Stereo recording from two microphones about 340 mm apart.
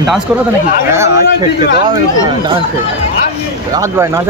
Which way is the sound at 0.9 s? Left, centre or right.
Centre.